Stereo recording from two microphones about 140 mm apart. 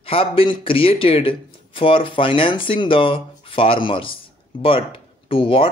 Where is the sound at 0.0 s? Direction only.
40° left (ahead or behind).